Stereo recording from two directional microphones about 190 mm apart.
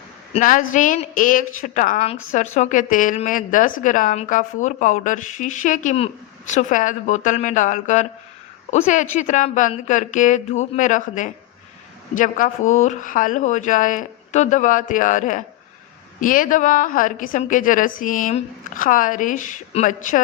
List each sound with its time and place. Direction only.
0.3 s a woman's voice: 45° left (ahead or behind)